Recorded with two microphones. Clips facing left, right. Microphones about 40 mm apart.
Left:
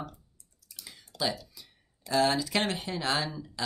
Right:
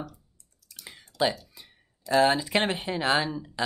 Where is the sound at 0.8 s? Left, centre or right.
Right.